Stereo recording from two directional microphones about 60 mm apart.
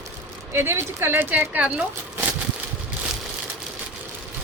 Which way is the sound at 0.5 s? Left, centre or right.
Right.